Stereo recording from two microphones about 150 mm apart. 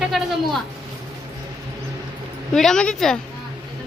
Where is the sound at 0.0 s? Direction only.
Centre (ahead or behind).